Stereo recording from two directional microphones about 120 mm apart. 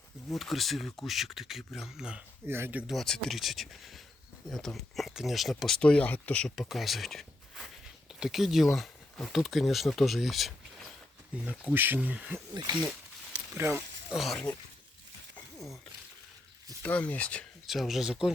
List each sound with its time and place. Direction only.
0.3 s speech: centre (ahead or behind)
2.5 s speech: 20° right (ahead or behind)
2.8 s speech: centre (ahead or behind)
6.6 s speech: centre (ahead or behind)
11.4 s speech: 15° right (ahead or behind)
13.6 s speech: 20° right (ahead or behind)
14.2 s speech: centre (ahead or behind)
16.8 s speech: 10° left (ahead or behind)
17.7 s speech: centre (ahead or behind)